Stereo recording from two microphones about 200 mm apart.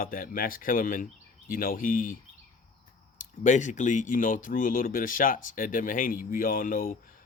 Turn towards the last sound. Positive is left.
turn(degrees=45)  # may be behind; listen again after turning